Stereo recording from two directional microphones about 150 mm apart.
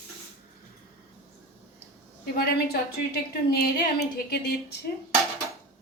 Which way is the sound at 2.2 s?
90° left.